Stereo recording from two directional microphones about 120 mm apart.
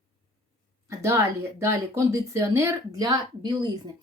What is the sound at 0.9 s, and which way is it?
Speech, 25° right (ahead or behind).